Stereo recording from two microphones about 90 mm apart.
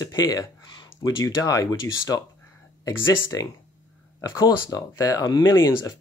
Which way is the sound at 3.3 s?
40° left (ahead or behind).